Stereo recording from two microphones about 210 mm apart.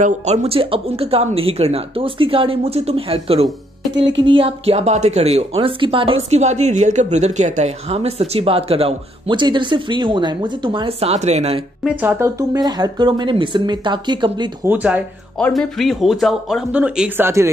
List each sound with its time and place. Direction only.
0.0 s speech: 30° right (ahead or behind)
3.9 s speech: 60° right (ahead or behind)
4.2 s speech: 25° right (ahead or behind)
11.8 s speech: 5° right (ahead or behind)
14.7 s speech: 5° right (ahead or behind)